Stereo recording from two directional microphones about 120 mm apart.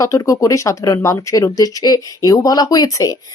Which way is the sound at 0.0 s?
25° left (ahead or behind).